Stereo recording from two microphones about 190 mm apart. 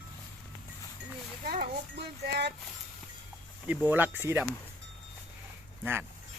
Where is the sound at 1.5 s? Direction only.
55° right (ahead or behind).